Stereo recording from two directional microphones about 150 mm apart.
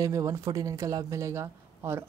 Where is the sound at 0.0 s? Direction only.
20° right (ahead or behind).